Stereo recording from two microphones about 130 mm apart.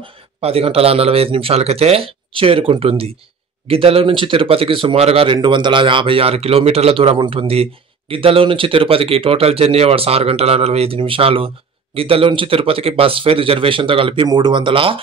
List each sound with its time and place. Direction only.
0.0 s speech: 50° right (ahead or behind)